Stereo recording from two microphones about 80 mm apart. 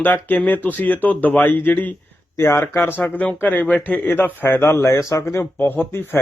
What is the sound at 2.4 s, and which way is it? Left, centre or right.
Speech, left.